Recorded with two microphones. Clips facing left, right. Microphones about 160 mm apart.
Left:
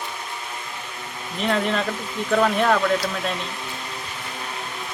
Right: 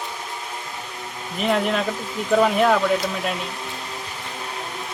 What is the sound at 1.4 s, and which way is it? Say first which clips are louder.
Speech: right 1 dB; 5° right (ahead or behind).